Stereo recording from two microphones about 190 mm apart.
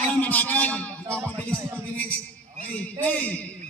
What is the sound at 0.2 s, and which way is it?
Music, 10° left (ahead or behind).